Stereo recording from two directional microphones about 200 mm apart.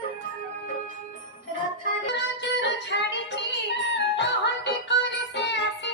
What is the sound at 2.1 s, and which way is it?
Music, 60° left (ahead or behind).